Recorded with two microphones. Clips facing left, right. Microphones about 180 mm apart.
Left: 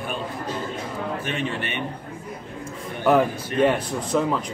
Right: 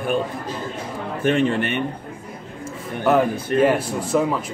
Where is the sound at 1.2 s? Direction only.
50° right (ahead or behind).